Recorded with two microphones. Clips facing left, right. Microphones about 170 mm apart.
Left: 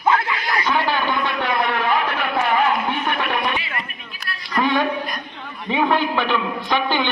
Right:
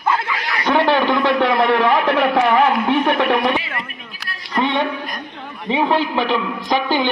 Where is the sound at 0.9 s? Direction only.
75° right (ahead or behind).